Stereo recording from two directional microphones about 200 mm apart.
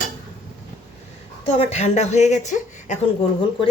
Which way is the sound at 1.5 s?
35° left (ahead or behind).